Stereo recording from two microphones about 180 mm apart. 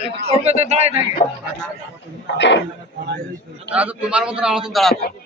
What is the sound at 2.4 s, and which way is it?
Speech, 80° left.